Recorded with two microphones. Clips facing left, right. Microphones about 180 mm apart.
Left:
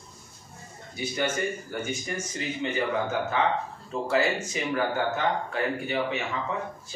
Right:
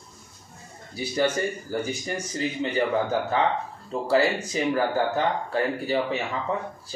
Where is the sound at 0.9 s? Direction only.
35° right (ahead or behind).